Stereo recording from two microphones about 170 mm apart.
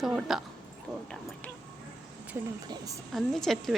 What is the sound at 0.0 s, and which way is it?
Speech, 5° right (ahead or behind).